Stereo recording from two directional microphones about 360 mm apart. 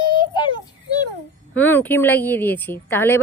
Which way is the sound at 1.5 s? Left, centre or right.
Centre.